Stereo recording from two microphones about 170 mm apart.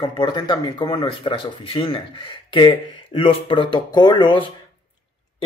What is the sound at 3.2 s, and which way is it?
Speech, 30° left (ahead or behind).